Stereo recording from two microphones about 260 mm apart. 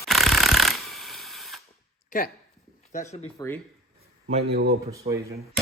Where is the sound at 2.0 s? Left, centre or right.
Left.